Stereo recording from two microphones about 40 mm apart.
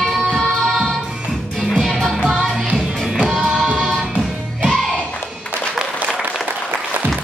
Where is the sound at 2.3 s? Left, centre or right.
Right.